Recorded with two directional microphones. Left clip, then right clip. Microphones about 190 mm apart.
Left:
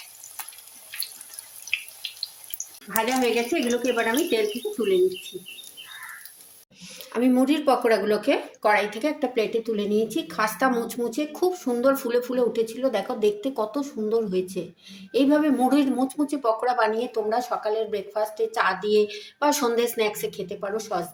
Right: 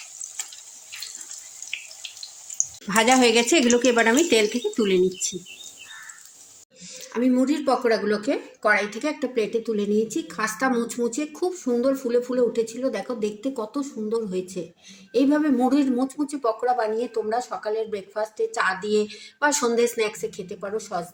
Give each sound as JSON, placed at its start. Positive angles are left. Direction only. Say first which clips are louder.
{"t": 2.9, "sound": "speech", "louder": "right 5 dB", "side_deg": -70}
{"t": 7.1, "sound": "speech", "louder": "left 1 dB", "side_deg": -5}